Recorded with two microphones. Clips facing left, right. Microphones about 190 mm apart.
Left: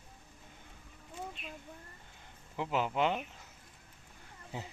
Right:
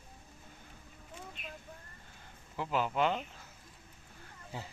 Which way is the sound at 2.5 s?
20° left (ahead or behind).